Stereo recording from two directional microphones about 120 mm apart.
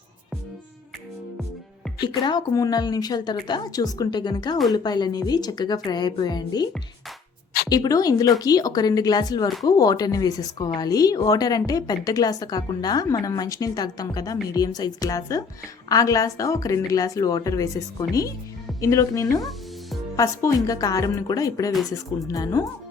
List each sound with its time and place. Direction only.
2.0 s a woman's voice: 35° left (ahead or behind)
7.7 s a woman's voice: 30° left (ahead or behind)